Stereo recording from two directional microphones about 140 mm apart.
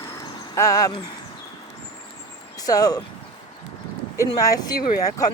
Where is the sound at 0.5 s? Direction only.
25° left (ahead or behind).